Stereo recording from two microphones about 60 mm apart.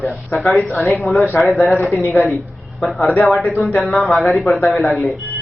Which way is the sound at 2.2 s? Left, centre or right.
Left.